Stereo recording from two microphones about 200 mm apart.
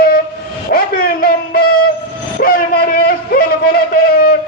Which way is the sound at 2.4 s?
45° left (ahead or behind).